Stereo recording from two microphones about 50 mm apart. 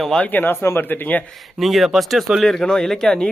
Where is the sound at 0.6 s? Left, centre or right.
Left.